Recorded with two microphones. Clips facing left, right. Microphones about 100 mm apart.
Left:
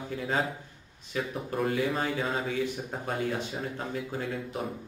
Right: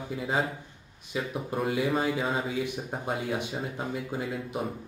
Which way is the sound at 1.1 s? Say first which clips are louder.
Right 1 dB; 10° right (ahead or behind).